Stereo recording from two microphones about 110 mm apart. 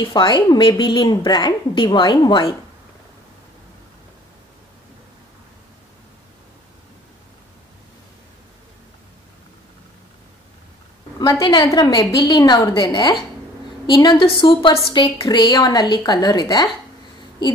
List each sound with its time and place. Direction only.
0.0 s a woman's voice: 45° left (ahead or behind)
11.1 s a sound: 30° left (ahead or behind)
11.4 s a woman's voice: 45° left (ahead or behind)
14.0 s a woman's voice: 50° left (ahead or behind)